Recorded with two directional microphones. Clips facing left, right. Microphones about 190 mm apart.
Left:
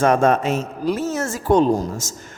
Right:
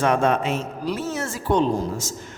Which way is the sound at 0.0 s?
45° left (ahead or behind).